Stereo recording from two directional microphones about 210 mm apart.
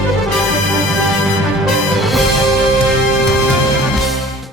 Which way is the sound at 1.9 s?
Centre (ahead or behind).